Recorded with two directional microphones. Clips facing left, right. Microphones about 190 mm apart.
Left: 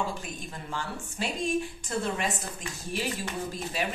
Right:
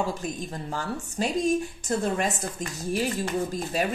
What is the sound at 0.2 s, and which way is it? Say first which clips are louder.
Speech: right 7 dB; 40° right (ahead or behind).